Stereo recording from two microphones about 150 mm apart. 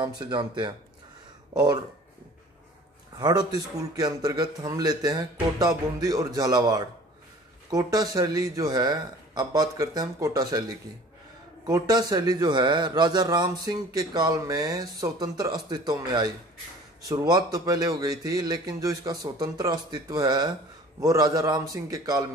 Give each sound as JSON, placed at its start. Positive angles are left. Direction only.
{"t": 0.2, "sound": "speech", "side_deg": -30}
{"t": 3.2, "sound": "a man's voice", "side_deg": -25}